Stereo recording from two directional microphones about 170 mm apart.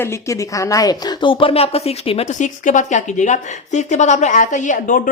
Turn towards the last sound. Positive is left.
turn(degrees=55)  # may be behind; listen again after turning